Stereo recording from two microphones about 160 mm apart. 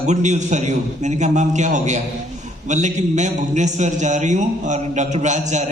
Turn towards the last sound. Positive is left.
turn(degrees=-45)  # may be behind; listen again after turning